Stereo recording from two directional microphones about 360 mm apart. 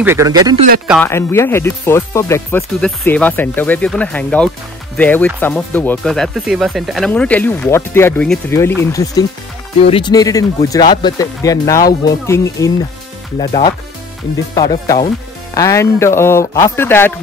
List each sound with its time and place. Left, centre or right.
0.0 s speech: centre
0.8 s speech: centre
14.5 s speech: centre